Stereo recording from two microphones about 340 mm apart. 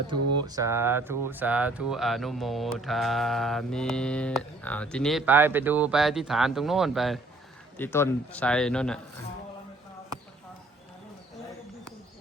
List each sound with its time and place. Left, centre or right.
0.2 s speech: right
0.4 s speech: centre